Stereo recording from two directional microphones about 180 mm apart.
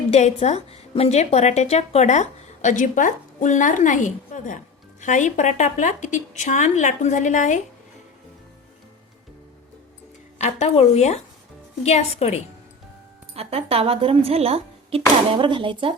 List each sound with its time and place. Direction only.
0.1 s a woman's voice: 35° left (ahead or behind)
10.3 s a woman's voice: 40° left (ahead or behind)
13.3 s speech: 35° right (ahead or behind)